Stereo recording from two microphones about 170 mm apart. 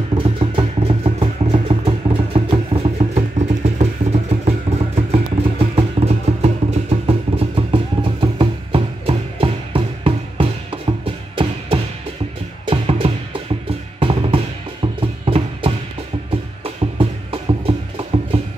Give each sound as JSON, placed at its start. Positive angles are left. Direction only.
{"t": 0.1, "sound": "music", "side_deg": -30}